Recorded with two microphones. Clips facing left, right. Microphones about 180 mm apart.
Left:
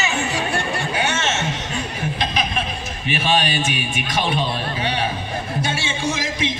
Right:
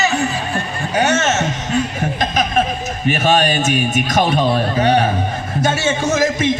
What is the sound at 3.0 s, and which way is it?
A man's voice, 45° right (ahead or behind).